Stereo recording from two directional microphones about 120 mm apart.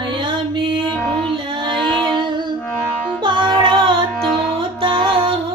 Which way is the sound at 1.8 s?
5° left (ahead or behind).